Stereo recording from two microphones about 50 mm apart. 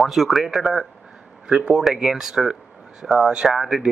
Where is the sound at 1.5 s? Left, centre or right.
Centre.